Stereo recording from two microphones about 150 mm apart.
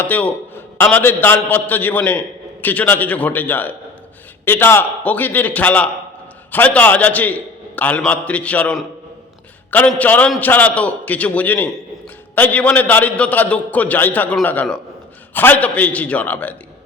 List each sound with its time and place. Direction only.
0.0 s a man's voice: 10° left (ahead or behind)